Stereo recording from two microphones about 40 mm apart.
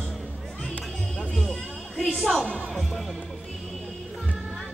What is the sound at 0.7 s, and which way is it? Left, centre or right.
Music, left.